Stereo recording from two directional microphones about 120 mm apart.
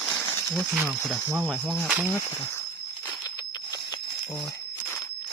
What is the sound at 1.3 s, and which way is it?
Speech, 15° right (ahead or behind).